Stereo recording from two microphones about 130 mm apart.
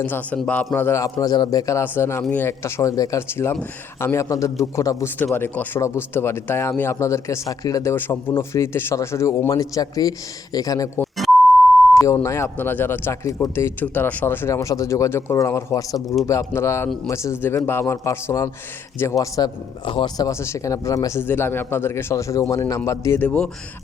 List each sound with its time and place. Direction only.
0.0 s a man's voice: 15° left (ahead or behind)
12.0 s speech: 20° left (ahead or behind)
16.0 s speech: centre (ahead or behind)
16.2 s speech: 25° left (ahead or behind)
19.8 s speech: 40° left (ahead or behind)
20.2 s speech: 25° left (ahead or behind)
23.2 s a man's voice: 10° left (ahead or behind)